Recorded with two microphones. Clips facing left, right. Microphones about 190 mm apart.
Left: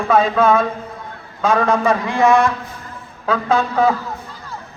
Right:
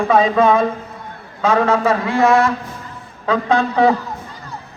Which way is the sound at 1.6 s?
5° right (ahead or behind).